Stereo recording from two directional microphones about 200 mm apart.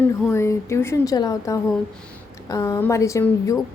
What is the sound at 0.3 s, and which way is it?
A woman's voice, 15° left (ahead or behind).